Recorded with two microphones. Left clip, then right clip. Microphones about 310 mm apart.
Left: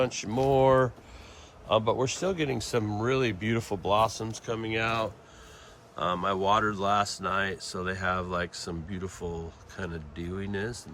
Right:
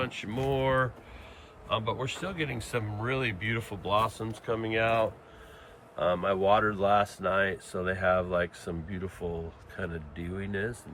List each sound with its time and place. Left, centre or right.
0.0 s speech: centre